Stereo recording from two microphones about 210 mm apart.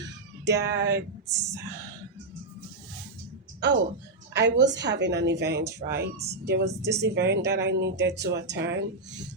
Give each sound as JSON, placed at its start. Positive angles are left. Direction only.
{"t": 0.0, "sound": "cat", "side_deg": -55}
{"t": 3.6, "sound": "a woman's voice", "side_deg": -55}